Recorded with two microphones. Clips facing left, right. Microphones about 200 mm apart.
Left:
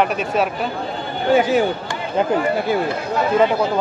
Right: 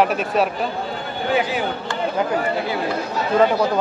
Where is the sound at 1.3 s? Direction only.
45° left (ahead or behind).